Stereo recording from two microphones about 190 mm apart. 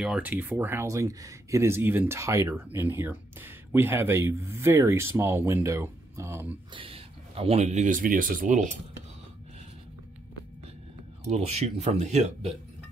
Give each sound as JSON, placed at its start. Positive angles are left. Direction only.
{"t": 0.0, "sound": "speech", "side_deg": -5}
{"t": 6.7, "sound": "speech", "side_deg": -30}
{"t": 11.2, "sound": "speech", "side_deg": -35}